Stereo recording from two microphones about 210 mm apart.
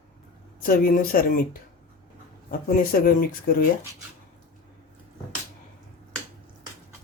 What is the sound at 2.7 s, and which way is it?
Speech, 45° left (ahead or behind).